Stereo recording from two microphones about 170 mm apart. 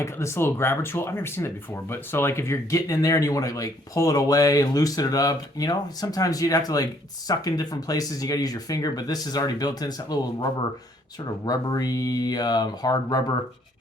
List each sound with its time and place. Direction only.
0.0 s speech: 15° left (ahead or behind)
11.4 s speech: 20° left (ahead or behind)